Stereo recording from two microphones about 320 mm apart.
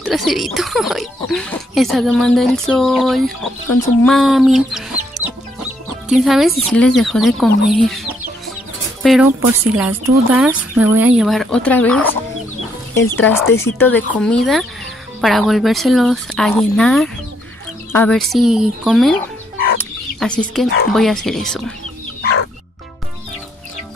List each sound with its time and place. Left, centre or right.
0.0 s speech: centre
6.0 s speech: centre
13.1 s speech: centre
19.8 s chicken: centre
20.9 s speech: centre
22.2 s music: left